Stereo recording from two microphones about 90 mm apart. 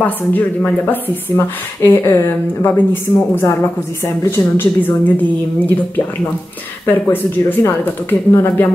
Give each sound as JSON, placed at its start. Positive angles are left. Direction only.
{"t": 0.0, "sound": "speech", "side_deg": 20}
{"t": 6.9, "sound": "speech", "side_deg": 20}